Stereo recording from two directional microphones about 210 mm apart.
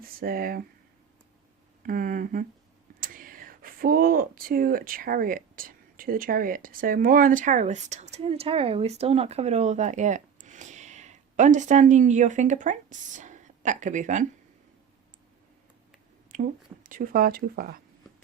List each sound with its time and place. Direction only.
0.0 s speech: 45° right (ahead or behind)
1.8 s speech: 40° right (ahead or behind)
16.3 s speech: 40° right (ahead or behind)